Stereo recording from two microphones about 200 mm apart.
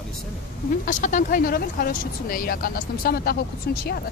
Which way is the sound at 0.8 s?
40° left (ahead or behind).